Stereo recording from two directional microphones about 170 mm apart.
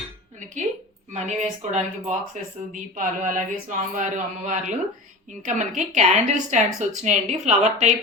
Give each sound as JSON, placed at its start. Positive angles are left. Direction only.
{"t": 1.1, "sound": "speech", "side_deg": -45}